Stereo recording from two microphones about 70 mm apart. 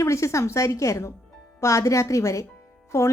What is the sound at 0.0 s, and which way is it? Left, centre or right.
A woman's voice, left.